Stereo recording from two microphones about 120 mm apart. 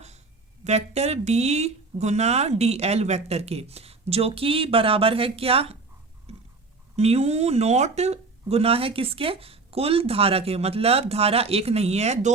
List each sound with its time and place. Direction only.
0.6 s speech: 65° right (ahead or behind)
6.3 s a sound: 60° right (ahead or behind)
6.9 s speech: 60° right (ahead or behind)